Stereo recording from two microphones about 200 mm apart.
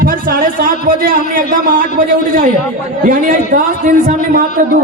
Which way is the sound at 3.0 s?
45° right (ahead or behind).